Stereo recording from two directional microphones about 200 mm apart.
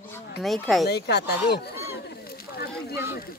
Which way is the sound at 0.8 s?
55° left (ahead or behind).